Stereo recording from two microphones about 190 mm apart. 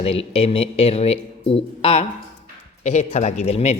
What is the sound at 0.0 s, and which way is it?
Speech, 30° left (ahead or behind).